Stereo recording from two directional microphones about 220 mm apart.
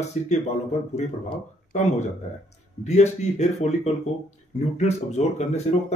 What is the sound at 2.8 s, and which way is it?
Speech, 30° left (ahead or behind).